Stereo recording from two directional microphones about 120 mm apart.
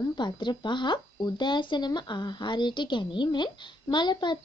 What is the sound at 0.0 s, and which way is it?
Speech, 35° left (ahead or behind).